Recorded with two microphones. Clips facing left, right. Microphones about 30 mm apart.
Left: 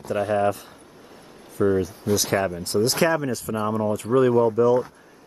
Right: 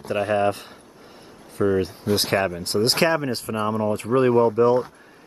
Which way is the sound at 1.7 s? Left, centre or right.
Right.